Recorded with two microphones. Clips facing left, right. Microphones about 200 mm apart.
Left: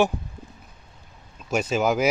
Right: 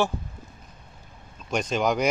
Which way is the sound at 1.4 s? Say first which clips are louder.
Left 2 dB; 5° left (ahead or behind).